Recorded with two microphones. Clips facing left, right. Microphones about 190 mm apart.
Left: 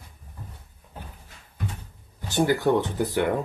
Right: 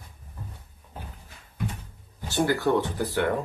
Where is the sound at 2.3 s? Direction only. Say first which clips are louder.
Left 2 dB; 15° left (ahead or behind).